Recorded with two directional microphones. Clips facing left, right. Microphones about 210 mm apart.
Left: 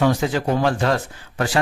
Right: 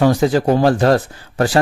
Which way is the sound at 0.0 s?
35° right (ahead or behind).